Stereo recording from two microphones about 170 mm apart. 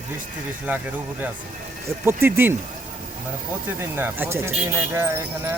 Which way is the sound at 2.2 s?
15° right (ahead or behind).